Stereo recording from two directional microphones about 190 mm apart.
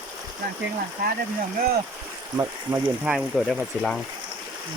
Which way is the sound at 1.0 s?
55° right (ahead or behind).